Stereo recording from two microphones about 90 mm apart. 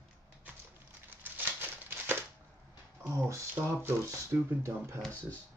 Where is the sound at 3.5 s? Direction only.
25° right (ahead or behind).